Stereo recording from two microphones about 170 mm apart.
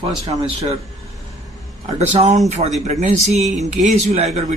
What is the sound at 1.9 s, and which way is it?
Speech, 40° right (ahead or behind).